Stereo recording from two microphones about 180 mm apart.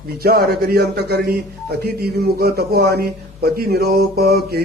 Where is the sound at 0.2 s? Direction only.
55° right (ahead or behind).